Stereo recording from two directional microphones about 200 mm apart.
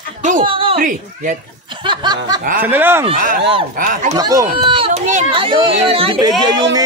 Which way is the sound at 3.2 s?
45° right (ahead or behind).